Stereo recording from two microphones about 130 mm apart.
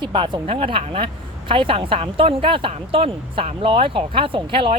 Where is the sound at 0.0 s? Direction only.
40° right (ahead or behind).